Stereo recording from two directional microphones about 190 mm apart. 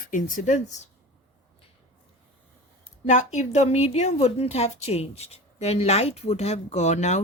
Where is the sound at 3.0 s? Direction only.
40° left (ahead or behind).